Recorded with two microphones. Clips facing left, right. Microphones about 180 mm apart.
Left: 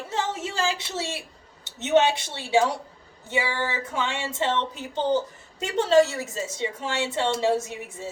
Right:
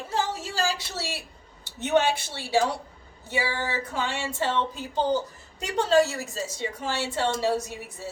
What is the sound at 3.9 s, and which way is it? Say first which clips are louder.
Speech: left 1 dB; 20° left (ahead or behind).